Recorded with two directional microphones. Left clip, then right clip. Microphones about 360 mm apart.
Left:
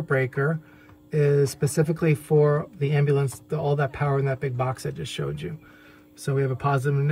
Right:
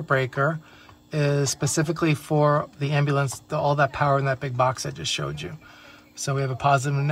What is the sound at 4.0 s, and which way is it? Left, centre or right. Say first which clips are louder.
Speech: right 4 dB; right.